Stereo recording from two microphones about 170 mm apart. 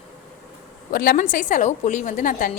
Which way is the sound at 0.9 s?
55° left (ahead or behind).